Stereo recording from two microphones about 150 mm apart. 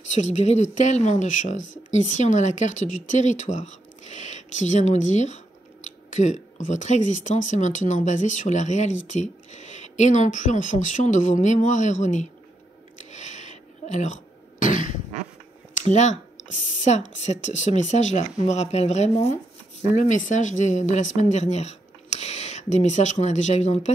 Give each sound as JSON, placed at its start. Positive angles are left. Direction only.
{"t": 0.1, "sound": "speech", "side_deg": 50}
{"t": 13.1, "sound": "cough", "side_deg": 50}
{"t": 15.8, "sound": "speech", "side_deg": 50}